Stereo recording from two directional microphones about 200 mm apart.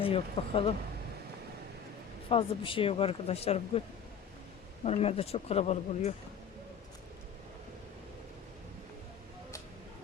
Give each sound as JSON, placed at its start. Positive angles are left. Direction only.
{"t": 0.0, "sound": "speech", "side_deg": 30}
{"t": 2.3, "sound": "speech", "side_deg": 25}
{"t": 4.9, "sound": "speech", "side_deg": 30}